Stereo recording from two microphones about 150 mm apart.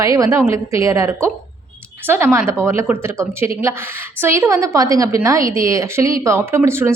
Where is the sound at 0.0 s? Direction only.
20° right (ahead or behind).